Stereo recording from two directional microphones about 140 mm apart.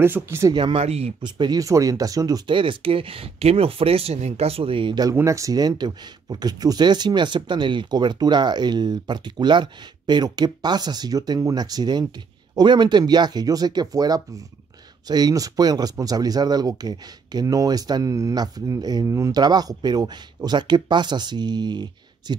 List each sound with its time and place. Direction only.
0.0 s speech: 15° right (ahead or behind)
0.5 s speech: 35° right (ahead or behind)
1.2 s speech: 30° right (ahead or behind)
5.1 s speech: 20° right (ahead or behind)